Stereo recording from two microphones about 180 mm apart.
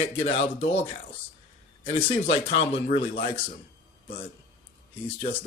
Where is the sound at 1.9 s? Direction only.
30° left (ahead or behind).